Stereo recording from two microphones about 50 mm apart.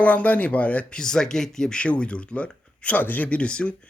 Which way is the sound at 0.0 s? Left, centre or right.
Left.